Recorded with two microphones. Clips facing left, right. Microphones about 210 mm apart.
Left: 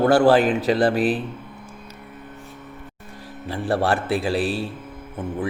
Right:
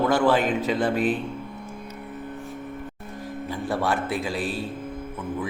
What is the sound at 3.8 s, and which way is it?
Mantra, 70° left (ahead or behind).